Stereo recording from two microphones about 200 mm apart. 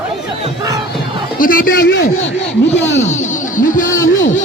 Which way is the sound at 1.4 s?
45° left (ahead or behind).